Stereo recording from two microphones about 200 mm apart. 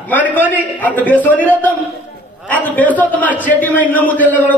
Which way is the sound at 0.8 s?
5° left (ahead or behind).